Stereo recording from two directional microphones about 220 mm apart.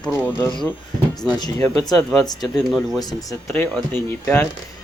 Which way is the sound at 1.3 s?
20° left (ahead or behind).